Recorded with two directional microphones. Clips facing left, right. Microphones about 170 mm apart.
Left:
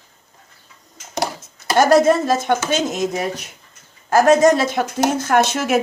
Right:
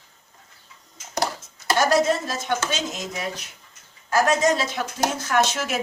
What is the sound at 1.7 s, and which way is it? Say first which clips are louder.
Speech: left 7 dB; 50° left (ahead or behind).